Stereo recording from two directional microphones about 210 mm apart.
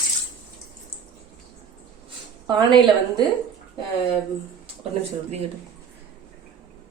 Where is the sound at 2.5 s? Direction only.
20° right (ahead or behind).